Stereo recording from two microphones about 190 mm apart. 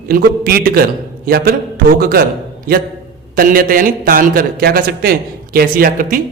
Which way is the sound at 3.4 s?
50° right (ahead or behind).